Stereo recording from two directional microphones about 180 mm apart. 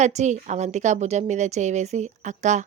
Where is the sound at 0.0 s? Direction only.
40° right (ahead or behind).